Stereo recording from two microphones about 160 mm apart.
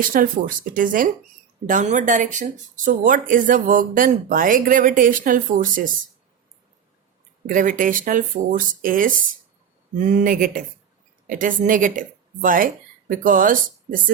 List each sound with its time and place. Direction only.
0.1 s speech: 60° right (ahead or behind)
7.4 s speech: 55° right (ahead or behind)